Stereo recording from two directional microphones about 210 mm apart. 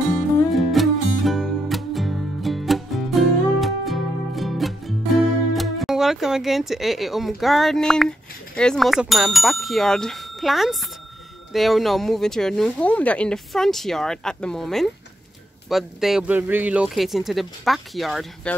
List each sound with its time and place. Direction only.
0.1 s music: centre (ahead or behind)
8.5 s speech: centre (ahead or behind)